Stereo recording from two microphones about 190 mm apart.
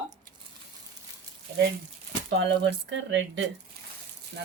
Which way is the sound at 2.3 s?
70° right (ahead or behind).